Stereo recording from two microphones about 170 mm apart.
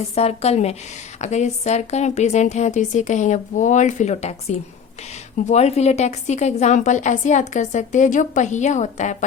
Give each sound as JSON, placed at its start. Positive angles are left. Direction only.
{"t": 0.1, "sound": "a woman's voice", "side_deg": 40}